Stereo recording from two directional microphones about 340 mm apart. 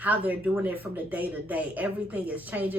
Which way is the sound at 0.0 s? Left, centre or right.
Centre.